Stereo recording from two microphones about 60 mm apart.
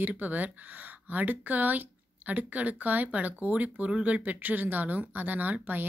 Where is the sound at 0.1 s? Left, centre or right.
Right.